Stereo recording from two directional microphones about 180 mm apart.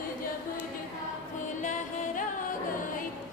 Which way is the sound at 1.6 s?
45° left (ahead or behind).